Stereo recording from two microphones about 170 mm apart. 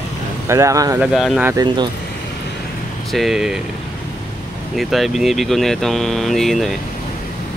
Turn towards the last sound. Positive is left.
turn(degrees=0)  # may be behind; listen again after turning